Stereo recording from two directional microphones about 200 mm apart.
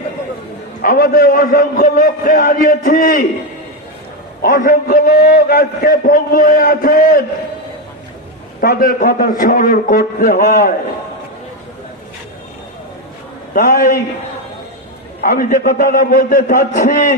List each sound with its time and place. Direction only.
0.8 s a man's voice: 45° left (ahead or behind)
4.4 s a man's voice: 45° left (ahead or behind)
8.5 s a man's voice: 45° left (ahead or behind)
13.5 s a man's voice: 40° left (ahead or behind)
15.2 s a man's voice: 45° left (ahead or behind)